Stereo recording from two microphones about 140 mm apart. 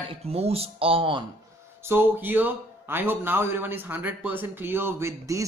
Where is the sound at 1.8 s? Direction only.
15° right (ahead or behind).